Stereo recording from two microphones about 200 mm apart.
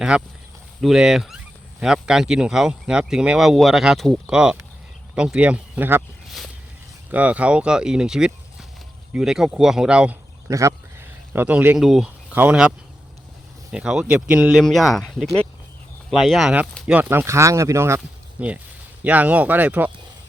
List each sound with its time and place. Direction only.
0.1 s speech: 5° right (ahead or behind)
10.5 s speech: 15° right (ahead or behind)